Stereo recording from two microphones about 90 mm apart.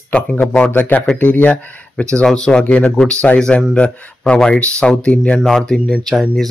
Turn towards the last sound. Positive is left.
turn(degrees=5)  # may be behind; listen again after turning